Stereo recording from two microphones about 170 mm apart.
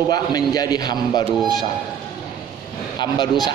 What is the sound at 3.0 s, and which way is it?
Speech, 25° left (ahead or behind).